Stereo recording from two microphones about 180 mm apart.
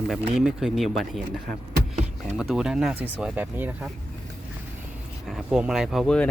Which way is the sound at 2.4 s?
5° right (ahead or behind).